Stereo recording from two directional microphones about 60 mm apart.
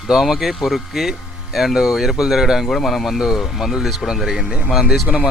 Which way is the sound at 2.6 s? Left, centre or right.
Centre.